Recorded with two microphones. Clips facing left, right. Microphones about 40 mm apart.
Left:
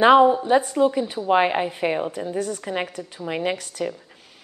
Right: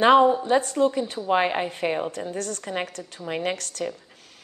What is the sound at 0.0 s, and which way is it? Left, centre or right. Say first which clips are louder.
A woman's voice: left 2 dB; centre.